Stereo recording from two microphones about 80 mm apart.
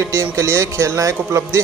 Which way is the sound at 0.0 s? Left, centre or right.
Right.